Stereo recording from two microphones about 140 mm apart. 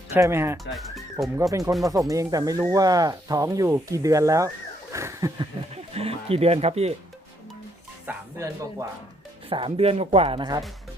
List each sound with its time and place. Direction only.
0.1 s speech: 20° right (ahead or behind)
0.6 s speech: centre (ahead or behind)
1.4 s speech: 20° right (ahead or behind)
5.7 s speech: 45° right (ahead or behind)
8.0 s speech: 20° right (ahead or behind)
9.5 s speech: 40° right (ahead or behind)